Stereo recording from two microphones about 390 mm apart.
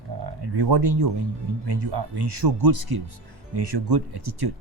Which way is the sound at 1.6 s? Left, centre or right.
Right.